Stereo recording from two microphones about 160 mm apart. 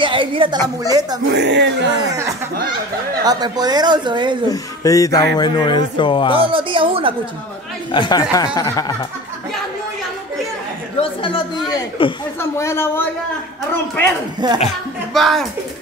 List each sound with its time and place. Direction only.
0.0 s a woman's voice: 30° right (ahead or behind)
1.3 s speech: 90° right
2.0 s a woman's voice: 20° right (ahead or behind)
4.5 s speech: 20° left (ahead or behind)
6.3 s speech: 35° right (ahead or behind)
7.9 s speech: 30° left (ahead or behind)
11.0 s speech: 30° left (ahead or behind)
12.4 s speech: 15° left (ahead or behind)
14.4 s a woman's voice: 25° right (ahead or behind)
15.1 s speech: centre (ahead or behind)